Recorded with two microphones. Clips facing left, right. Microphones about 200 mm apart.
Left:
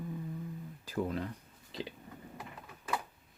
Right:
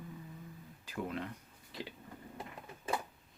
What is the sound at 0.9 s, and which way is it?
Speech, 35° left (ahead or behind).